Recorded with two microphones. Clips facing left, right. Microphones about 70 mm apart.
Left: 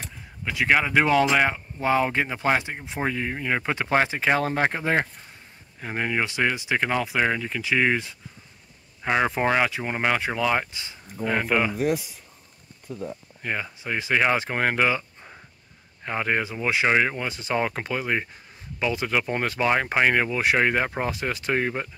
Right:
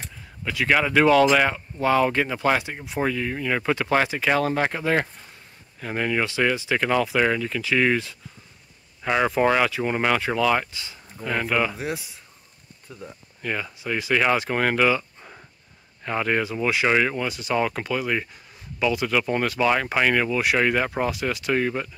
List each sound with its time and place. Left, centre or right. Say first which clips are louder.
0.5 s speech: even; centre
13.4 s speech: right 2 dB; left